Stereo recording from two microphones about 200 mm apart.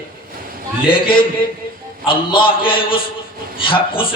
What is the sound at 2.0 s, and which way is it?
A man's voice, 25° left (ahead or behind).